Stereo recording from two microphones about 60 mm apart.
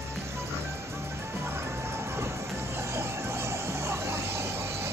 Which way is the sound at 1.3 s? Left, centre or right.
Right.